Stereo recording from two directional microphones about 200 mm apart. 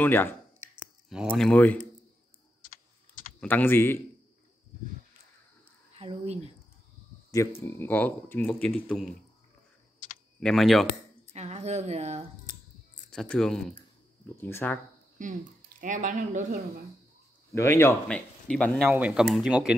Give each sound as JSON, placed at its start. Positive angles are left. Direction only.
{"t": 0.0, "sound": "speech", "side_deg": 10}
{"t": 1.1, "sound": "speech", "side_deg": -5}
{"t": 1.5, "sound": "speech", "side_deg": 10}
{"t": 3.3, "sound": "speech", "side_deg": 10}
{"t": 5.9, "sound": "speech", "side_deg": -30}
{"t": 7.6, "sound": "speech", "side_deg": 10}
{"t": 10.4, "sound": "speech", "side_deg": 0}
{"t": 11.2, "sound": "speech", "side_deg": -35}
{"t": 13.1, "sound": "speech", "side_deg": 5}
{"t": 15.2, "sound": "speech", "side_deg": -40}
{"t": 17.5, "sound": "speech", "side_deg": 15}